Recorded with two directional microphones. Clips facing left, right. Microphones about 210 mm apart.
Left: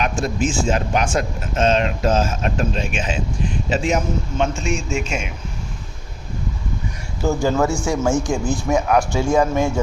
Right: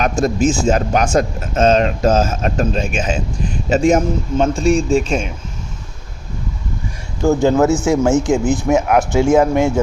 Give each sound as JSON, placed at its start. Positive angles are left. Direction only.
{"t": 0.0, "sound": "speech", "side_deg": -40}
{"t": 7.3, "sound": "speech", "side_deg": -20}